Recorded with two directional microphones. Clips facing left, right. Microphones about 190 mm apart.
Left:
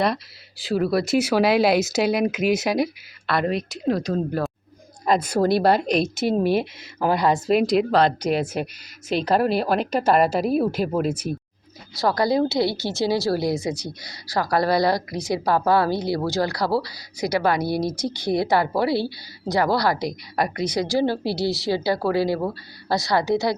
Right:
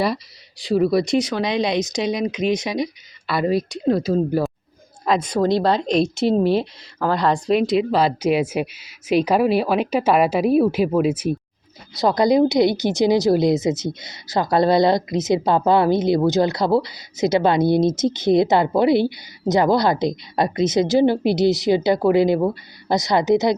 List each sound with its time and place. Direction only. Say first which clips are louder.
0.0 s a woman's voice: right 1 dB; centre (ahead or behind)
11.9 s speech: right 4 dB; 20° right (ahead or behind)